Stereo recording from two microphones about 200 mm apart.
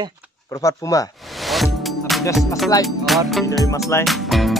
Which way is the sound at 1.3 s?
Centre (ahead or behind).